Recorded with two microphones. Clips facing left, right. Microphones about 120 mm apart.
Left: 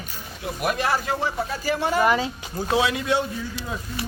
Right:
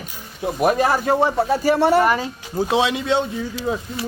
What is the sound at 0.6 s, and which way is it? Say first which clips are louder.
Speech: right 6 dB; 40° right (ahead or behind).